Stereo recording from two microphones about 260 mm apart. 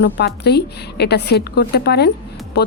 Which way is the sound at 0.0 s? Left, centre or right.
Left.